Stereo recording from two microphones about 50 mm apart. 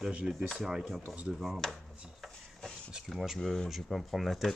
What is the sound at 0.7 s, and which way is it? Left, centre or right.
Speech, centre.